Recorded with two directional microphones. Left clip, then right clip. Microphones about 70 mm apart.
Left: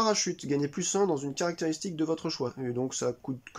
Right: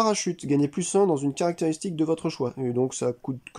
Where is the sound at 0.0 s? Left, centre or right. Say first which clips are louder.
Right 3 dB; right.